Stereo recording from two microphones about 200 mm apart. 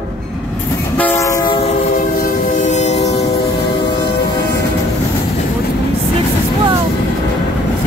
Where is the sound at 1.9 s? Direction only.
40° left (ahead or behind).